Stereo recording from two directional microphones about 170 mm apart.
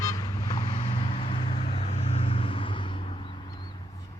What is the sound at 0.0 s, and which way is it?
Vehicle, 20° left (ahead or behind).